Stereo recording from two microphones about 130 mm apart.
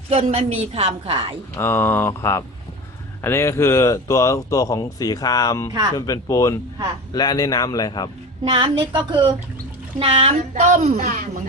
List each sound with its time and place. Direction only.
0.1 s a woman's voice: 55° right (ahead or behind)
1.5 s a man's voice: 15° left (ahead or behind)
8.4 s a woman's voice: 40° right (ahead or behind)
10.5 s speech: 70° right (ahead or behind)